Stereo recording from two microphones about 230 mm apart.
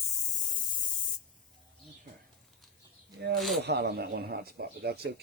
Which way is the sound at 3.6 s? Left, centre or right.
Right.